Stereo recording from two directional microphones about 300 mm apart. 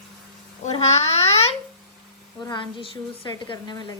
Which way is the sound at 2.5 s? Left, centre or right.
Centre.